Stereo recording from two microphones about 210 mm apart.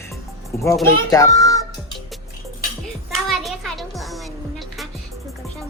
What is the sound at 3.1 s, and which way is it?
Music, centre (ahead or behind).